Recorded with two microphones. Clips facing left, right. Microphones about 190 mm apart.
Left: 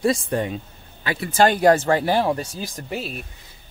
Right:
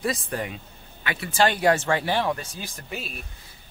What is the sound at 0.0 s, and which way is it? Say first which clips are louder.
Speech: left 7 dB; 30° left (ahead or behind).